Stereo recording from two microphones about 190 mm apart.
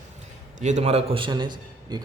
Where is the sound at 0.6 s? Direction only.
35° right (ahead or behind).